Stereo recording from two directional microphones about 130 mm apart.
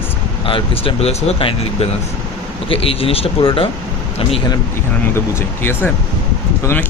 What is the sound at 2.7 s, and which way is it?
Speech, 45° left (ahead or behind).